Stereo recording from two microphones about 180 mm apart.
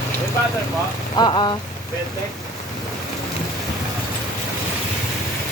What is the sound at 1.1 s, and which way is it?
Rain on surface, 25° left (ahead or behind).